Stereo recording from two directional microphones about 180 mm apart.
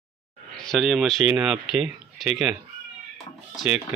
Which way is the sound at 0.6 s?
Centre (ahead or behind).